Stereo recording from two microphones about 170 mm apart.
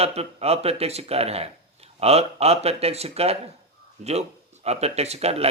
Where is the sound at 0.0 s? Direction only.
35° right (ahead or behind).